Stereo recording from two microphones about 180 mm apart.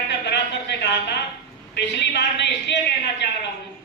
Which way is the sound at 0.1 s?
70° left (ahead or behind).